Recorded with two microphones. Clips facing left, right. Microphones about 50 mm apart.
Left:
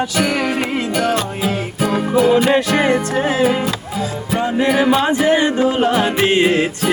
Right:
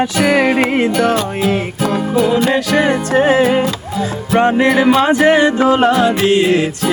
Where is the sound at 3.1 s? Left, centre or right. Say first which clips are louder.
Right 5 dB; right.